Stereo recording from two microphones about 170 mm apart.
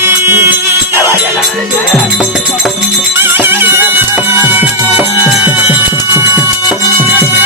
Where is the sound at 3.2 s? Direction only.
10° right (ahead or behind).